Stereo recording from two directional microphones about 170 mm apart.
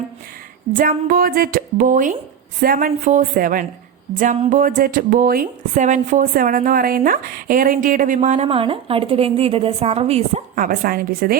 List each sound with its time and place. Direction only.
0.7 s a woman's voice: 55° right (ahead or behind)